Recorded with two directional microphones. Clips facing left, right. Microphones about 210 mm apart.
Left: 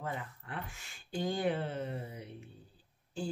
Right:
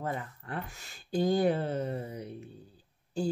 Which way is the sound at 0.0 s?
40° right (ahead or behind).